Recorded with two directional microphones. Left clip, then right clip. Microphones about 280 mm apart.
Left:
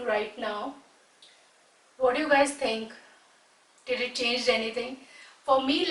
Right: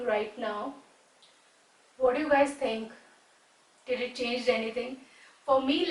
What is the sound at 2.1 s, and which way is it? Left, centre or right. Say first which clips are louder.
Speech: left 2 dB; centre.